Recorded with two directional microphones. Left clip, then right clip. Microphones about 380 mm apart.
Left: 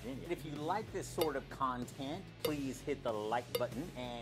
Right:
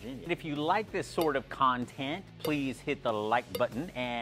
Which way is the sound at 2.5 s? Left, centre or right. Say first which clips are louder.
Right 7 dB; right.